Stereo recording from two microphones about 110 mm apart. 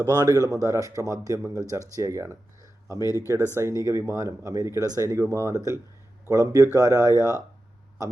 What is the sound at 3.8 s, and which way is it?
Speech, 30° right (ahead or behind).